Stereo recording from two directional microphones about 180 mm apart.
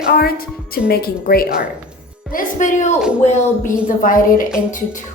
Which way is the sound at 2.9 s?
5° right (ahead or behind).